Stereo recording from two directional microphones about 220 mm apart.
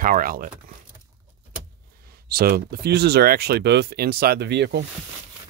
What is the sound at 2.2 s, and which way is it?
Speech, 45° right (ahead or behind).